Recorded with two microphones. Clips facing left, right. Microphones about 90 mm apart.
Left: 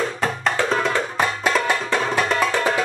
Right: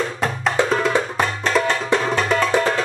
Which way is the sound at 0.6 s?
20° right (ahead or behind).